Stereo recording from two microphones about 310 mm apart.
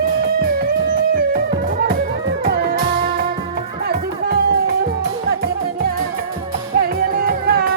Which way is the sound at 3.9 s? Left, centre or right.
Right.